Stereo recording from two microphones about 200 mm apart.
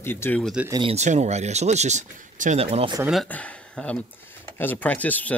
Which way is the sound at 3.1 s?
5° left (ahead or behind).